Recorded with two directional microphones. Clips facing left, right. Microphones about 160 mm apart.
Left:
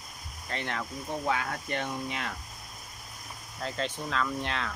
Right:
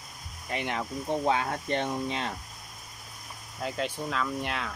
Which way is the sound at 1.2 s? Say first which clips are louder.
Right 2 dB; 25° right (ahead or behind).